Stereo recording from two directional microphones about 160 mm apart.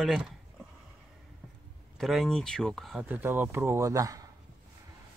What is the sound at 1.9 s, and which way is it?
Speech, centre (ahead or behind).